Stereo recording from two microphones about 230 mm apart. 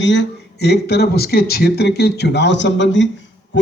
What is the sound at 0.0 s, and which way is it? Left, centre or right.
A man's voice, left.